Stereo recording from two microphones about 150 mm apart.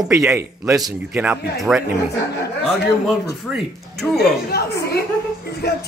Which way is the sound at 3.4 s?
Centre (ahead or behind).